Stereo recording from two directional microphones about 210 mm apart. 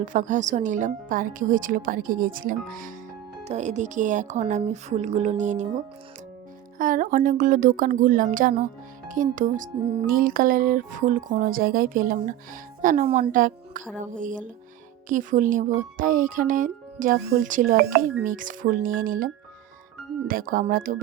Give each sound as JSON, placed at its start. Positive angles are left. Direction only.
{"t": 0.0, "sound": "speech", "side_deg": -35}
{"t": 6.7, "sound": "speech", "side_deg": -40}